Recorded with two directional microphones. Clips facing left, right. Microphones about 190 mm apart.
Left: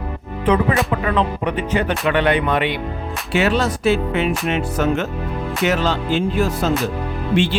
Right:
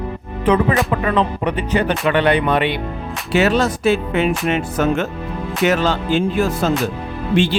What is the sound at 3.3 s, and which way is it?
Speech, 40° right (ahead or behind).